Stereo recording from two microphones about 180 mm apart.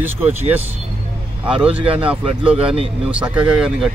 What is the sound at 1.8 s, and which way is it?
Speech, 30° right (ahead or behind).